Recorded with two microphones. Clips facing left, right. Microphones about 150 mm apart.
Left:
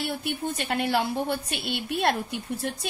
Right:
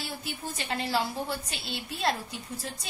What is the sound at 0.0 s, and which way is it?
A woman's voice, 60° left (ahead or behind).